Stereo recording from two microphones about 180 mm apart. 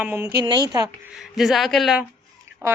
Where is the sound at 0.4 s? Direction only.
25° right (ahead or behind).